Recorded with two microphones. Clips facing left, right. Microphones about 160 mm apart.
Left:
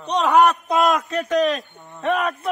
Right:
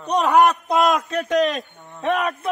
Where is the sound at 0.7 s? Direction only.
Centre (ahead or behind).